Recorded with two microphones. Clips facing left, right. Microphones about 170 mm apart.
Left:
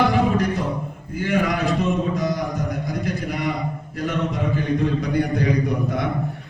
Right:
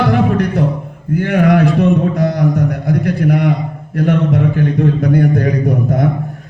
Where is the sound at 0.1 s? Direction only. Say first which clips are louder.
Right 6 dB; 60° right (ahead or behind).